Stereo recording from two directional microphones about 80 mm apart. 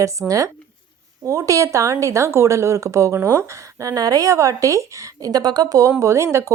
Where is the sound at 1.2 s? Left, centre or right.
Right.